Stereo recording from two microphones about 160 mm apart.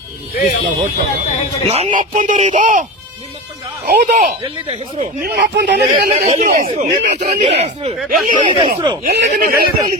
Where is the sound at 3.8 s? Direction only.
80° right.